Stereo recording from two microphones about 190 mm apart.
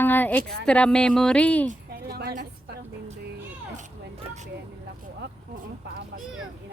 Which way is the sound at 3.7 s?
40° right (ahead or behind).